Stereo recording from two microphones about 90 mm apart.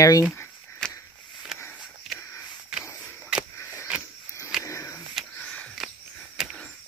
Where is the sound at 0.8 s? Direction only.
5° left (ahead or behind).